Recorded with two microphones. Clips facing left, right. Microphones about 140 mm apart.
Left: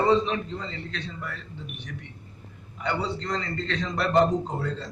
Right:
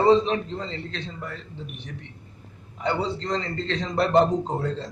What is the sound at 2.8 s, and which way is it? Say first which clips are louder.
A man's voice: right 3 dB; 30° right (ahead or behind).